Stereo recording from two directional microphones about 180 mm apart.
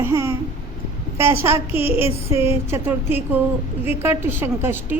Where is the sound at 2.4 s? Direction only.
15° right (ahead or behind).